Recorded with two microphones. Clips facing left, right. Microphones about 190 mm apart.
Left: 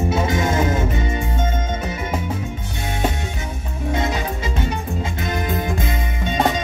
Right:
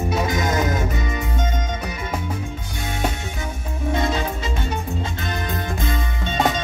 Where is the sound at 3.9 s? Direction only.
20° left (ahead or behind).